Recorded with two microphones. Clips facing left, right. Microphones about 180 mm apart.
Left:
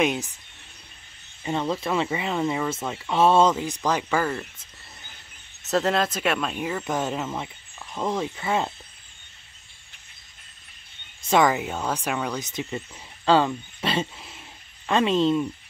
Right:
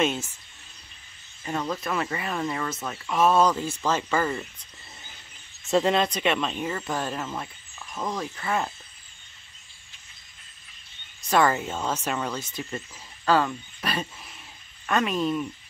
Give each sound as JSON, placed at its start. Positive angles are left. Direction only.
{"t": 0.0, "sound": "speech", "side_deg": 15}
{"t": 1.4, "sound": "speech", "side_deg": 25}
{"t": 3.1, "sound": "speech", "side_deg": 30}
{"t": 5.7, "sound": "speech", "side_deg": 0}
{"t": 6.9, "sound": "speech", "side_deg": 20}
{"t": 11.2, "sound": "speech", "side_deg": 15}